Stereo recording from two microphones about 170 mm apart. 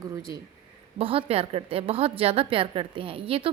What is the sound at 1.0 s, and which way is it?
A woman's voice, 35° right (ahead or behind).